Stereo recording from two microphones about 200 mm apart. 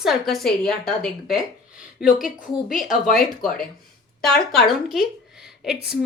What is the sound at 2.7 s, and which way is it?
Speech, 40° left (ahead or behind).